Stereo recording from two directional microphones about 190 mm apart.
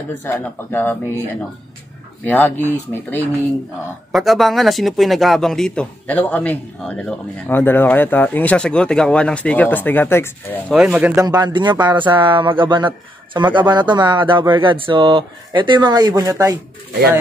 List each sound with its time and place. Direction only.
0.2 s a man's voice: 10° left (ahead or behind)
4.1 s a man's voice: centre (ahead or behind)
10.7 s speech: 5° right (ahead or behind)
11.2 s a man's voice: 20° right (ahead or behind)